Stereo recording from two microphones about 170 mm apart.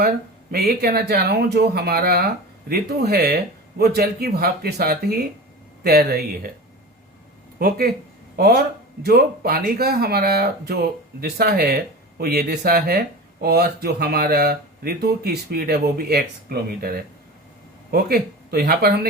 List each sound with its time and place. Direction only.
0.5 s speech: 65° right (ahead or behind)
8.4 s speech: 65° right (ahead or behind)